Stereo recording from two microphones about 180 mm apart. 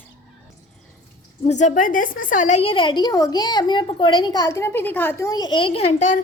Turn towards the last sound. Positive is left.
turn(degrees=40)  # may be behind; listen again after turning